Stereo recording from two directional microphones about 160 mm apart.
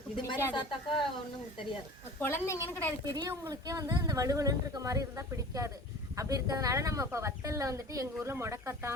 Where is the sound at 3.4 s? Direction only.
20° right (ahead or behind).